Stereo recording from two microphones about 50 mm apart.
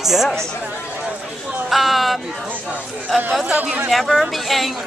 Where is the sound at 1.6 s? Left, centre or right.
Centre.